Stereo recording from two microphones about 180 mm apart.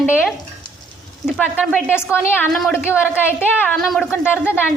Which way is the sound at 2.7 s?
10° left (ahead or behind).